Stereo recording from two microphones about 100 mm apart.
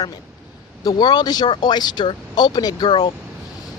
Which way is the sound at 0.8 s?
45° left (ahead or behind).